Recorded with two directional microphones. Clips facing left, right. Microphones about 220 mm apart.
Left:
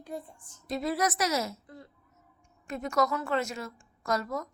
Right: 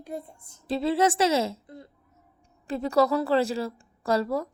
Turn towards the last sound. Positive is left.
turn(degrees=-30)  # may be behind; listen again after turning